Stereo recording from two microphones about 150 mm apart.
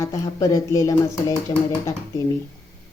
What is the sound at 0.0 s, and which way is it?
Speech, 20° left (ahead or behind).